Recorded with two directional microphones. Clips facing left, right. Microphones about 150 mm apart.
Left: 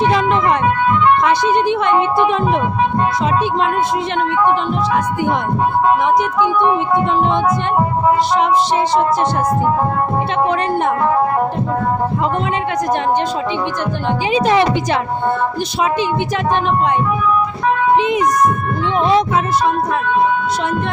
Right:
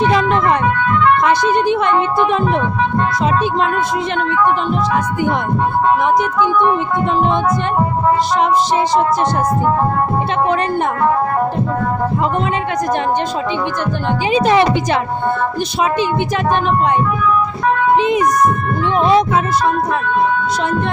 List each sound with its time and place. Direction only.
14.3 s a woman's voice: 55° right (ahead or behind)